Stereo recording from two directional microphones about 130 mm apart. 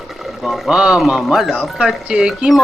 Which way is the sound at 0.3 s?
Centre (ahead or behind).